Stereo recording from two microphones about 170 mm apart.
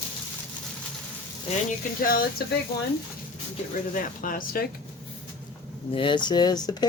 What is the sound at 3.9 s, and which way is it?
Speech, 55° left (ahead or behind).